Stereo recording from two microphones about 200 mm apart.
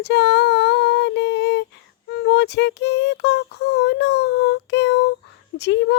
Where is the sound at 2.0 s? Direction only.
55° left (ahead or behind).